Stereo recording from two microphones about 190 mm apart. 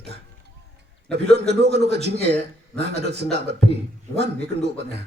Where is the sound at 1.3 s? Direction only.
60° right (ahead or behind).